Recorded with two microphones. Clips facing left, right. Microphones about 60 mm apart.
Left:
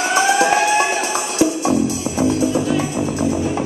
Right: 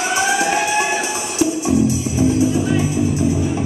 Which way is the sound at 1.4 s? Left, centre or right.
Left.